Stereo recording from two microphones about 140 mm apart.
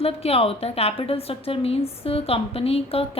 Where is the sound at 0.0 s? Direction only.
45° left (ahead or behind).